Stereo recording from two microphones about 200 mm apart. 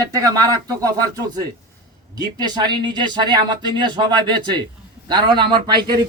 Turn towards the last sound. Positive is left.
turn(degrees=-20)  # may be behind; listen again after turning